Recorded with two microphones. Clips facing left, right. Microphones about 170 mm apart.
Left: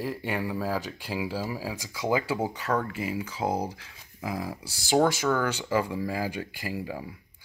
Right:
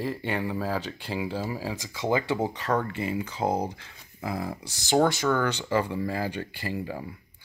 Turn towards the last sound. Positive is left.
turn(degrees=5)  # may be behind; listen again after turning